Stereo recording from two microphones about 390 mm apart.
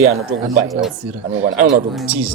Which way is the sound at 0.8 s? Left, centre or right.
Centre.